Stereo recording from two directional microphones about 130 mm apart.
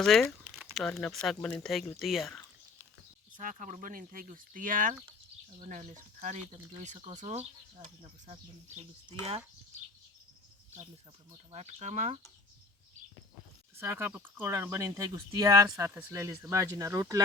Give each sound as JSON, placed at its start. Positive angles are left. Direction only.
{"t": 0.0, "sound": "speech", "side_deg": 0}
{"t": 3.3, "sound": "speech", "side_deg": -80}
{"t": 5.6, "sound": "speech", "side_deg": -70}
{"t": 8.3, "sound": "speech", "side_deg": -45}
{"t": 11.5, "sound": "speech", "side_deg": -60}
{"t": 13.7, "sound": "speech", "side_deg": -20}